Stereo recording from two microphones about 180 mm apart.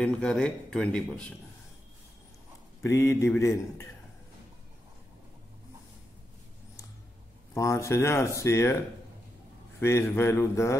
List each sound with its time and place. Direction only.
0.0 s speech: 5° left (ahead or behind)
2.8 s speech: 15° left (ahead or behind)
7.5 s speech: 15° left (ahead or behind)
9.8 s speech: 15° left (ahead or behind)